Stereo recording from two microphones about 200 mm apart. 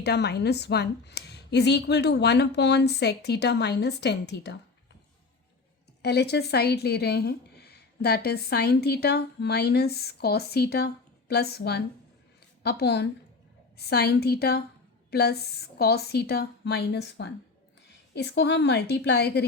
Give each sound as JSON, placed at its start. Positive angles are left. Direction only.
{"t": 0.0, "sound": "a woman's voice", "side_deg": 55}
{"t": 6.0, "sound": "a woman's voice", "side_deg": 55}